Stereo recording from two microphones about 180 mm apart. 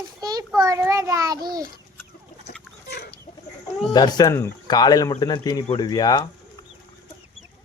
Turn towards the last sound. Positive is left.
turn(degrees=20)  # may be behind; listen again after turning